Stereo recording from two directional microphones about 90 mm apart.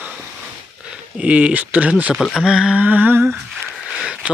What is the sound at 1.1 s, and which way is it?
Speech, 15° right (ahead or behind).